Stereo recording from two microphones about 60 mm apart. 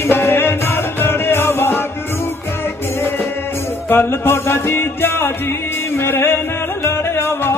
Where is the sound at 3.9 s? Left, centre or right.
Left.